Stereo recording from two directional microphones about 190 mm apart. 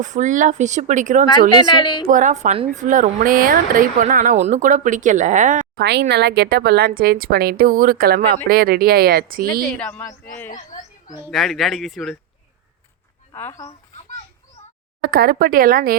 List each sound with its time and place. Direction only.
0.0 s speech: 40° right (ahead or behind)
1.5 s a woman's voice: 25° left (ahead or behind)
2.0 s speech: 40° right (ahead or behind)
5.7 s a woman's voice: 60° right (ahead or behind)
9.6 s speech: 5° left (ahead or behind)
10.5 s a sound: 40° left (ahead or behind)
11.3 s speech: centre (ahead or behind)
13.3 s speech: 15° left (ahead or behind)
14.6 s a sound: 35° left (ahead or behind)
15.0 s speech: 55° right (ahead or behind)